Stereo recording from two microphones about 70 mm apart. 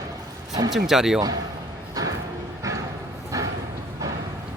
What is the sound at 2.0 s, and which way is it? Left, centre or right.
Bow-wow, right.